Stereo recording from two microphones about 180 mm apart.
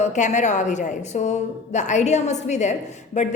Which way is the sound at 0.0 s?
40° left (ahead or behind).